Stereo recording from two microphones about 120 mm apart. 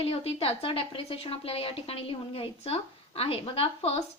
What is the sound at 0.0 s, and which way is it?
A woman's voice, 55° left (ahead or behind).